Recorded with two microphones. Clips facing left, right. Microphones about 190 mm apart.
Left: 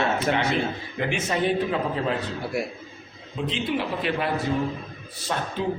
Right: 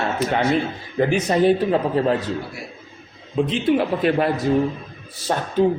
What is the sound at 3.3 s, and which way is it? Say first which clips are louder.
Speech: right 8 dB; 50° right (ahead or behind).